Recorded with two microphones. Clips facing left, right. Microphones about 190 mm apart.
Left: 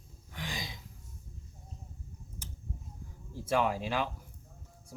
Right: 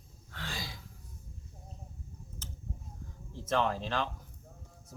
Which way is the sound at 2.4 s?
10° left (ahead or behind).